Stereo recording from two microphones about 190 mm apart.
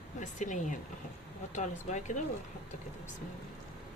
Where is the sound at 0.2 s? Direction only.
40° left (ahead or behind).